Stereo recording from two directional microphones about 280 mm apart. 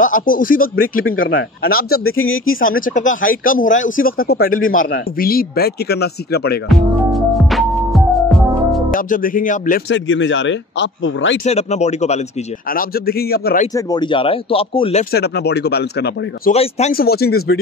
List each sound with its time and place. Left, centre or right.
0.0 s speech: left
0.9 s speech: left
2.0 s speech: left
2.7 s a man's voice: left
7.4 s music: centre
8.9 s a man's voice: left
11.4 s a man's voice: left
13.7 s speech: centre
15.1 s a man's voice: left
16.5 s a man's voice: left